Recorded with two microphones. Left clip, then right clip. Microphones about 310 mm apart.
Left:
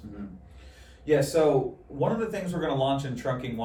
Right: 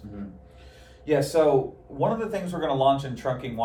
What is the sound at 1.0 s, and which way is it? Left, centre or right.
Speech, centre.